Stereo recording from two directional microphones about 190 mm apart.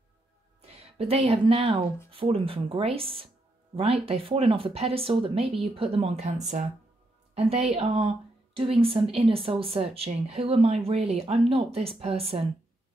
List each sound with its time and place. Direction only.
0.6 s a woman's voice: 30° right (ahead or behind)